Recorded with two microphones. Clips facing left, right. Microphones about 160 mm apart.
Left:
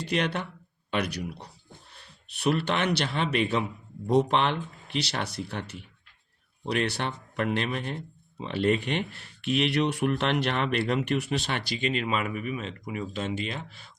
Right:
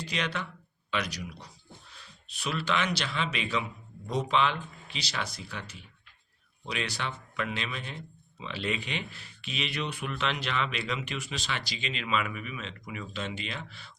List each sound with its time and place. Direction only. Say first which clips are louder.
0.0 s speech: left 6 dB; 60° left (ahead or behind)
12.0 s speech: left 3 dB; 40° left (ahead or behind)